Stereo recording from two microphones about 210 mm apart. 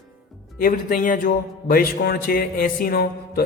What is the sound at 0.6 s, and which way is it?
A man's voice, 45° left (ahead or behind).